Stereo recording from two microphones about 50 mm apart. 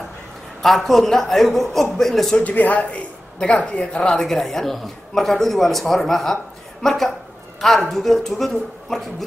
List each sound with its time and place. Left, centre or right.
0.6 s a man's voice: centre
2.4 s a man's voice: left; by 9.0 s centre